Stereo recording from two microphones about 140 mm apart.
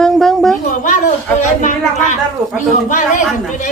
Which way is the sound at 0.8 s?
65° left (ahead or behind).